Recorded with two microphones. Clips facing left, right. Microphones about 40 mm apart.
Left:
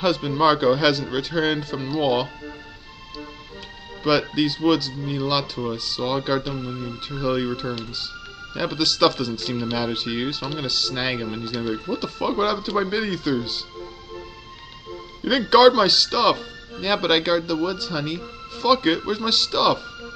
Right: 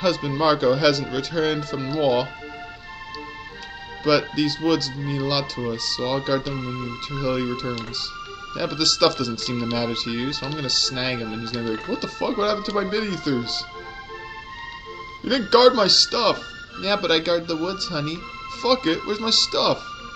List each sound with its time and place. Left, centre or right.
0.0 s speech: centre
4.0 s speech: centre
6.5 s speech: right
7.1 s speech: centre
15.5 s speech: centre